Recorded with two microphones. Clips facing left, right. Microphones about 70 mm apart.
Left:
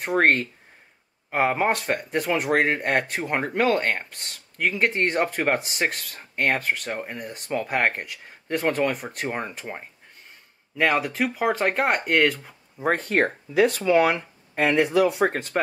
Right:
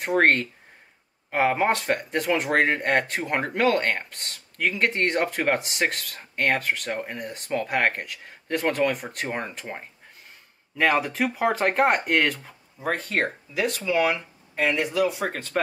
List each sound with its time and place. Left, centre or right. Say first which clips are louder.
0.0 s speech: even; centre
12.8 s speech: left 4 dB; left
13.6 s speech: left 5 dB; left
15.2 s speech: left 3 dB; centre